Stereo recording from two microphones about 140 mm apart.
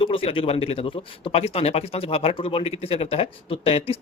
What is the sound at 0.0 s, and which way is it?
Speech, 40° left (ahead or behind).